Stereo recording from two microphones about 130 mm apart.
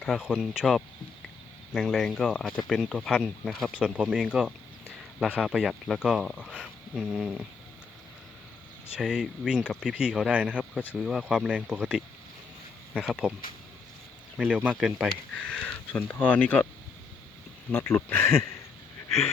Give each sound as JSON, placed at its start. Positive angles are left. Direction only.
{"t": 0.0, "sound": "speech", "side_deg": -5}
{"t": 3.8, "sound": "speech", "side_deg": -10}
{"t": 9.0, "sound": "speech", "side_deg": -5}
{"t": 14.5, "sound": "speech", "side_deg": -10}
{"t": 15.4, "sound": "speech", "side_deg": 10}
{"t": 17.7, "sound": "speech", "side_deg": 15}